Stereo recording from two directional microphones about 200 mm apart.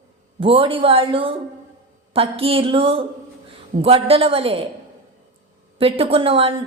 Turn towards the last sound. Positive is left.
turn(degrees=-30)  # may be behind; listen again after turning